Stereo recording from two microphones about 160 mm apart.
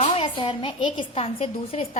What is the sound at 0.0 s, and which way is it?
A woman's voice, 35° left (ahead or behind).